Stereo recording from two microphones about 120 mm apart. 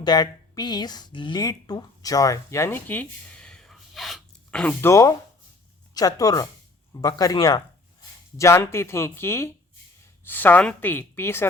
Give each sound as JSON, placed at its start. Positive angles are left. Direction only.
{"t": 0.0, "sound": "speech", "side_deg": 35}
{"t": 4.6, "sound": "a woman's voice", "side_deg": 20}